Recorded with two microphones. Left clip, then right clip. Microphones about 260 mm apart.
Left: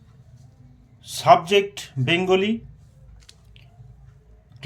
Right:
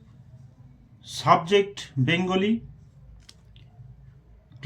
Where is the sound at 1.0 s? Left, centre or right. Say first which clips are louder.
Left 5 dB; left.